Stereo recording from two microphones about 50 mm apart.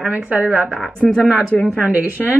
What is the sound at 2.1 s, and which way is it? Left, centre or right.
Speech, right.